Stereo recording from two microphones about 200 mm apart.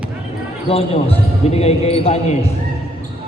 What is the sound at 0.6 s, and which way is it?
Speech, 30° left (ahead or behind).